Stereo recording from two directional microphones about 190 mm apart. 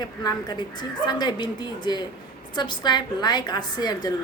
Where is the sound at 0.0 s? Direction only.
20° left (ahead or behind).